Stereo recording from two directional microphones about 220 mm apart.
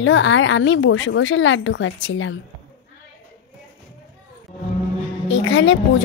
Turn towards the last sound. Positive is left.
turn(degrees=60)  # may be behind; listen again after turning